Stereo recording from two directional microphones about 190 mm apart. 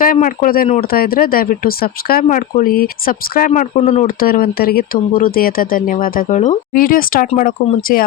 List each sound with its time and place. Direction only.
0.0 s speech: 45° left (ahead or behind)
4.2 s speech: 50° left (ahead or behind)